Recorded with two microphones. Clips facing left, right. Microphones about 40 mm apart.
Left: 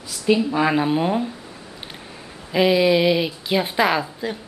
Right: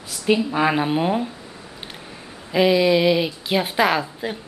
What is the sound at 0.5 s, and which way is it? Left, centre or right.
Speech, centre.